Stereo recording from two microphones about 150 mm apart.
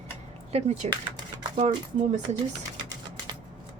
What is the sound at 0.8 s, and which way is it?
Speech, 45° right (ahead or behind).